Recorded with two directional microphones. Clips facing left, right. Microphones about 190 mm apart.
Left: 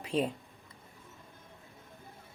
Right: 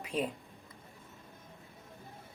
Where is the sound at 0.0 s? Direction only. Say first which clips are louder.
Left 3 dB; 30° left (ahead or behind).